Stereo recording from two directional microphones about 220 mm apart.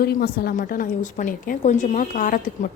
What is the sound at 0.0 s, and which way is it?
A woman's voice, 45° left (ahead or behind).